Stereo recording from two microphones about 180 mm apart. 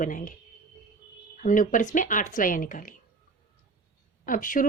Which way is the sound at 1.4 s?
45° left (ahead or behind).